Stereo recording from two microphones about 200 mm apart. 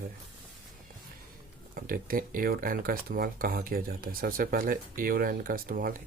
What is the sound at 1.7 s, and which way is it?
Speech, 45° right (ahead or behind).